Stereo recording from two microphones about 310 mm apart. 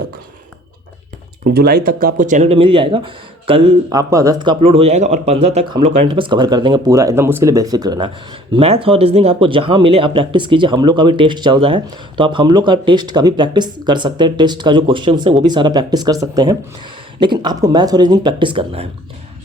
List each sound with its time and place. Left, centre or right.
1.5 s speech: right